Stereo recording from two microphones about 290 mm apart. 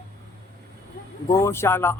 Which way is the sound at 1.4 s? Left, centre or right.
Centre.